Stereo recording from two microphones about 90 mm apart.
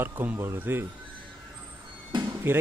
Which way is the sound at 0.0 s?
25° right (ahead or behind).